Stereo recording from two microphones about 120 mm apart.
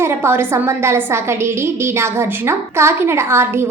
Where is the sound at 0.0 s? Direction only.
20° right (ahead or behind).